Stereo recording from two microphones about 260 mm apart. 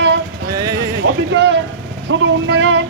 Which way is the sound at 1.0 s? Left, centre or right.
Right.